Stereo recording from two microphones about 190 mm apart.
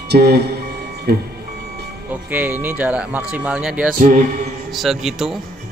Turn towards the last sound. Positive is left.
turn(degrees=0)  # may be behind; listen again after turning